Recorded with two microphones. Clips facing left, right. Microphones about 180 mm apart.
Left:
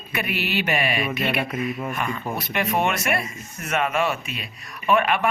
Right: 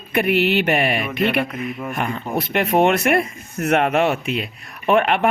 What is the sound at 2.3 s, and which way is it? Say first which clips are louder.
Speech: right 8 dB; 55° right (ahead or behind).